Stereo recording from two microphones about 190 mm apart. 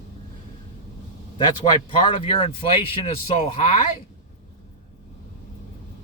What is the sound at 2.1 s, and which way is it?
Speech, 30° left (ahead or behind).